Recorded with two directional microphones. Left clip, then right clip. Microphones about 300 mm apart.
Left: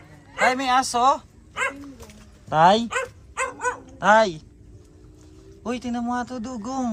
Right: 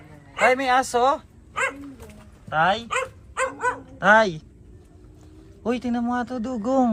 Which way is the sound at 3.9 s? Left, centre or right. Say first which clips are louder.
Even; centre.